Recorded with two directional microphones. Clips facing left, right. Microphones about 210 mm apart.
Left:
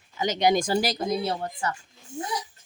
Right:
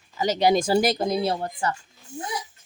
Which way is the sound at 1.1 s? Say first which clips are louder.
Right 3 dB; 35° right (ahead or behind).